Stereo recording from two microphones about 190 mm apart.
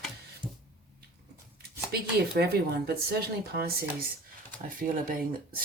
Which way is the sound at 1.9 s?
55° right (ahead or behind).